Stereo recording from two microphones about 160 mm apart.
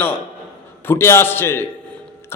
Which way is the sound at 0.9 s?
15° left (ahead or behind).